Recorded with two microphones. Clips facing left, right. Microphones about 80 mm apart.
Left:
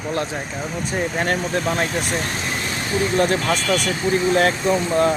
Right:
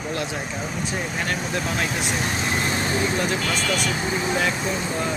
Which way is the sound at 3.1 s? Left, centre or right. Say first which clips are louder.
Left 6 dB; left.